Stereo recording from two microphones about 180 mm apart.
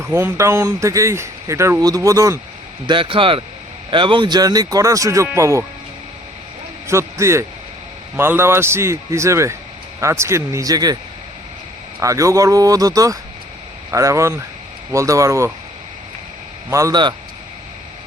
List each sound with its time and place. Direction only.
0.0 s speech: 15° right (ahead or behind)
2.8 s speech: 30° right (ahead or behind)
6.8 s a man's voice: 15° right (ahead or behind)
11.9 s speech: 15° right (ahead or behind)
16.6 s speech: 15° right (ahead or behind)